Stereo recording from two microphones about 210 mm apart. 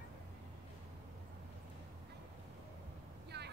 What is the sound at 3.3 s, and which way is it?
Vehicle, 50° right (ahead or behind).